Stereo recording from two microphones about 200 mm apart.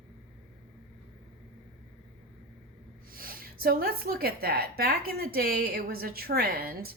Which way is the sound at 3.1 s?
45° right (ahead or behind).